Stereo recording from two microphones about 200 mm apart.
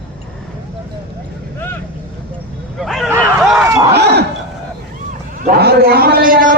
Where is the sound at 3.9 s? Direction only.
55° right (ahead or behind).